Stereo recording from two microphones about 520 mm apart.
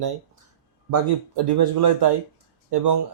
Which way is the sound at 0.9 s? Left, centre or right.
Right.